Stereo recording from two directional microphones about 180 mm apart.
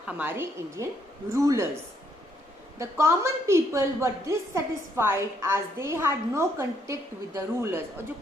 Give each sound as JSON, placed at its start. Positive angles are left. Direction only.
{"t": 0.1, "sound": "a woman's voice", "side_deg": -10}
{"t": 2.7, "sound": "a woman's voice", "side_deg": -15}